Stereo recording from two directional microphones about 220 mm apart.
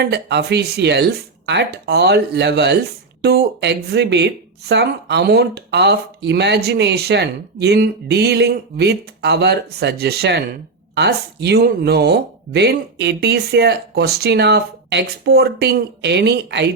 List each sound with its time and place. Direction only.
0.0 s speech: 50° right (ahead or behind)